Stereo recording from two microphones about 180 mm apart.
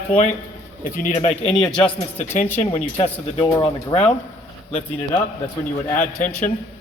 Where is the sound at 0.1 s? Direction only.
40° left (ahead or behind).